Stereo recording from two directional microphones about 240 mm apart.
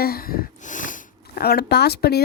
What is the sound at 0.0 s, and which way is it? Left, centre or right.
Speech, left.